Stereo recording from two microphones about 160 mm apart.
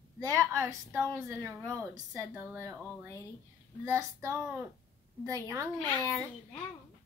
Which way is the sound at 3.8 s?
20° right (ahead or behind).